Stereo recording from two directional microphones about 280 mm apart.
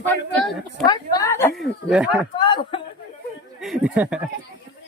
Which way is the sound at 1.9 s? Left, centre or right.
Centre.